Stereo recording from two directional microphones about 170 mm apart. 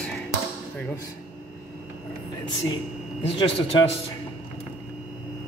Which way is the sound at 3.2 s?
30° left (ahead or behind).